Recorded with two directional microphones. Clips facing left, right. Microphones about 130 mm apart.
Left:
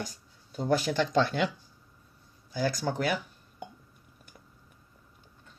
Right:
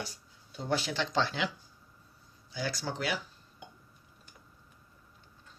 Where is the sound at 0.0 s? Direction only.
45° left (ahead or behind).